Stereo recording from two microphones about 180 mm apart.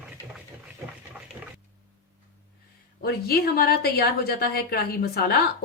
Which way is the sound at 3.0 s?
60° left (ahead or behind).